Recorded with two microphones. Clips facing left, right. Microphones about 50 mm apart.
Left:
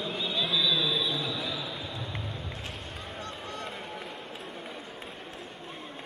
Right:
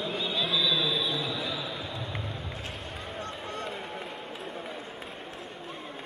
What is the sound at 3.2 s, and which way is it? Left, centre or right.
Run, right.